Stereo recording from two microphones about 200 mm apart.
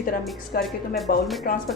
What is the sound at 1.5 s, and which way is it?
Speech, 50° left (ahead or behind).